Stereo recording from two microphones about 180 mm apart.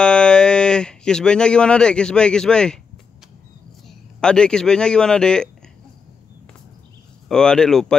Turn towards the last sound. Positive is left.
turn(degrees=5)  # may be behind; listen again after turning